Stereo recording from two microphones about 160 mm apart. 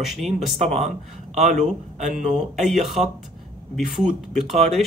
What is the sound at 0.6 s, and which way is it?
Speech, 40° right (ahead or behind).